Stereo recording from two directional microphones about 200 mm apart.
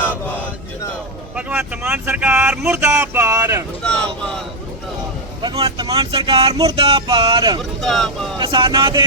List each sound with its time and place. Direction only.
1.4 s speech: 5° right (ahead or behind)
3.8 s speech: 5° left (ahead or behind)
5.4 s speech: 20° right (ahead or behind)
7.6 s speech: centre (ahead or behind)
8.4 s speech: 25° right (ahead or behind)